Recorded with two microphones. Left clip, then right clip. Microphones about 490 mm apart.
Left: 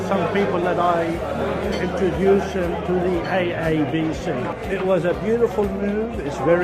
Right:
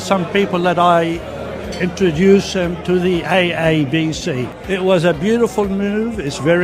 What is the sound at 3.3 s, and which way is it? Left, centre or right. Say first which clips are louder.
A man's voice: right 6 dB; right.